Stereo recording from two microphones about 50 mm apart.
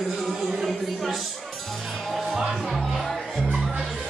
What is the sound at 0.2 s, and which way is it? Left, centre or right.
Music, centre.